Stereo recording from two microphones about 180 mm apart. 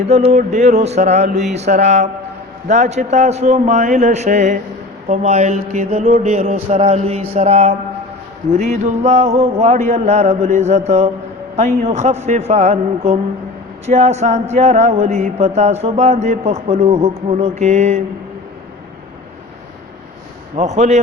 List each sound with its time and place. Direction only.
0.1 s mantra: 40° right (ahead or behind)
13.8 s mantra: 40° right (ahead or behind)
20.6 s mantra: 40° right (ahead or behind)